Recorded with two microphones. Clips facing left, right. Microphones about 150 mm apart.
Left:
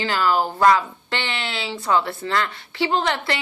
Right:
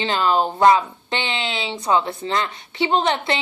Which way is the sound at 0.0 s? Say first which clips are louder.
Right 1 dB; 20° right (ahead or behind).